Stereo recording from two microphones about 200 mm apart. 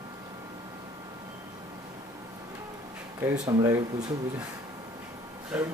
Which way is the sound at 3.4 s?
15° right (ahead or behind).